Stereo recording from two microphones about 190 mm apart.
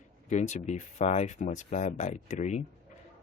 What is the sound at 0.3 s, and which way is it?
Speech, 40° left (ahead or behind).